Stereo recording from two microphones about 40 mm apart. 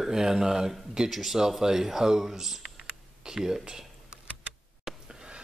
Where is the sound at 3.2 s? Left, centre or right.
Centre.